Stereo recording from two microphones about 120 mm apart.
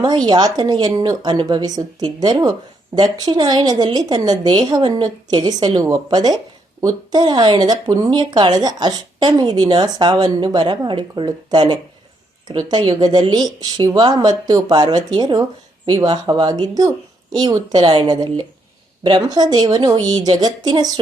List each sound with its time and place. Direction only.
0.0 s a woman's voice: 35° right (ahead or behind)